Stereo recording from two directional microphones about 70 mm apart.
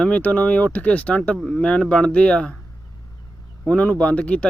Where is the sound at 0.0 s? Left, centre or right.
Centre.